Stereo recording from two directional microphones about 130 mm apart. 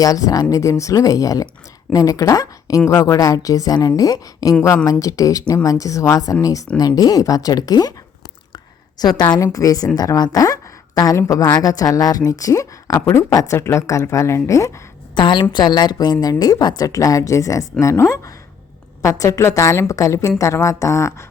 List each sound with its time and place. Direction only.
0.0 s speech: 25° left (ahead or behind)
9.1 s speech: 30° left (ahead or behind)
15.1 s a woman's voice: 35° left (ahead or behind)